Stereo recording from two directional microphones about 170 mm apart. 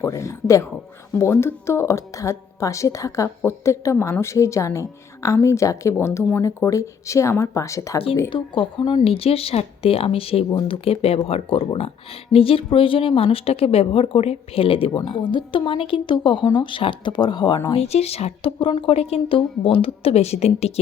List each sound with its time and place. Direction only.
0.0 s a woman's voice: 15° left (ahead or behind)
8.3 s speech: 30° left (ahead or behind)
17.7 s speech: 35° left (ahead or behind)